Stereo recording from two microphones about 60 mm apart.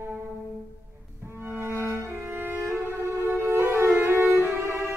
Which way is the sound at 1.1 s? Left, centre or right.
Right.